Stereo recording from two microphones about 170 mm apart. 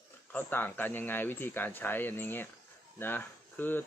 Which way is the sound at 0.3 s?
10° left (ahead or behind).